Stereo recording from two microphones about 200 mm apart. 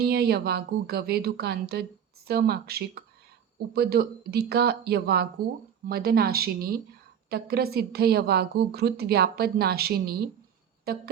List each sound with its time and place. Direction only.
0.0 s speech: 50° right (ahead or behind)